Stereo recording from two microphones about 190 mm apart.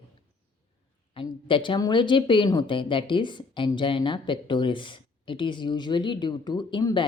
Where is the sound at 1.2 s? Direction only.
30° left (ahead or behind).